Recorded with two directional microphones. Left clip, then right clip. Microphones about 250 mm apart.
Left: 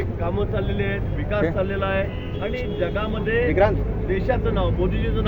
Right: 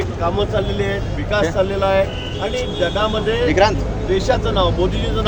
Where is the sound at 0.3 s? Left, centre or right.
Centre.